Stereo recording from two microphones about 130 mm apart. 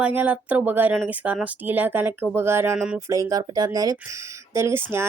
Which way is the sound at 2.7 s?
5° right (ahead or behind).